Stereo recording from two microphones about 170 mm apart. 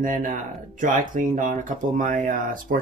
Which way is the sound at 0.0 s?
50° right (ahead or behind).